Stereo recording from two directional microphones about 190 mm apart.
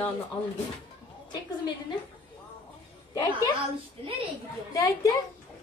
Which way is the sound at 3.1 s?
20° left (ahead or behind).